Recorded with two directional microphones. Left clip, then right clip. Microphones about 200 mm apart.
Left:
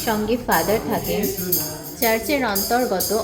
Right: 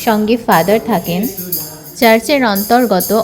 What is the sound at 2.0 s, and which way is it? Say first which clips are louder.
A woman's voice: right 10 dB; 45° right (ahead or behind).